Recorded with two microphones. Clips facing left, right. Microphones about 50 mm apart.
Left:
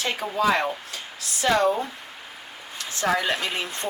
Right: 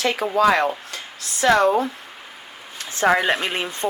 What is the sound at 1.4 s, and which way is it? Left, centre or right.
Speech, right.